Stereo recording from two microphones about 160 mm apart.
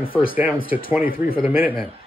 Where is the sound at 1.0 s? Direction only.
65° left (ahead or behind).